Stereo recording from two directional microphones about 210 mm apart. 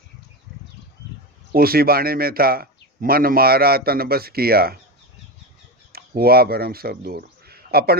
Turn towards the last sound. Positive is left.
turn(degrees=-45)  # may be behind; listen again after turning